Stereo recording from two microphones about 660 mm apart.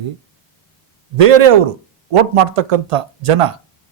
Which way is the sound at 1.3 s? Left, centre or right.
Right.